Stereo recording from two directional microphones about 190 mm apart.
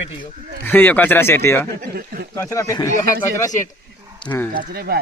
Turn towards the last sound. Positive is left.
turn(degrees=-55)  # may be behind; listen again after turning